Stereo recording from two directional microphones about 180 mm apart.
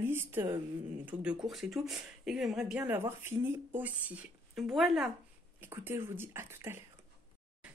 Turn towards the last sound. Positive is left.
turn(degrees=-15)  # may be behind; listen again after turning